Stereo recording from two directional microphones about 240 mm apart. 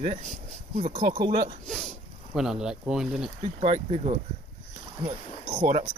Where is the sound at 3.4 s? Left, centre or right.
Right.